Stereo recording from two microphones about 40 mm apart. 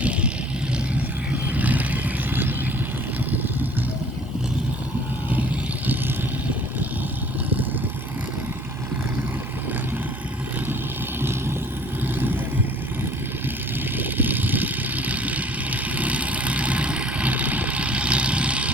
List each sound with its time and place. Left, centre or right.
0.0 s vehicle: right
1.3 s vehicle: right
5.3 s vehicle: right
11.2 s vehicle: right
13.9 s vehicle: right